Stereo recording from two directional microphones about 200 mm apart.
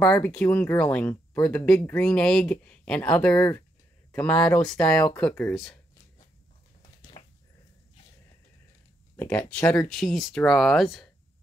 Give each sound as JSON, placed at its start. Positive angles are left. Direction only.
{"t": 0.0, "sound": "speech", "side_deg": 10}
{"t": 7.0, "sound": "dog", "side_deg": 25}
{"t": 9.1, "sound": "speech", "side_deg": 10}